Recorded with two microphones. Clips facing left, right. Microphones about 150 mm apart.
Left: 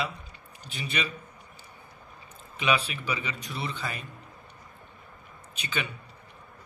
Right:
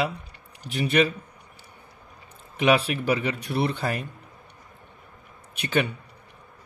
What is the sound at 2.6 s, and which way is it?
A man's voice, 65° right (ahead or behind).